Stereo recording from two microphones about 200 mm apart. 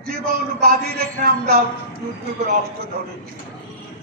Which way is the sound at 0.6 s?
50° right (ahead or behind).